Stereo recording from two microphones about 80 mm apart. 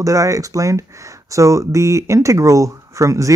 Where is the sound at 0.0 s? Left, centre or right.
Right.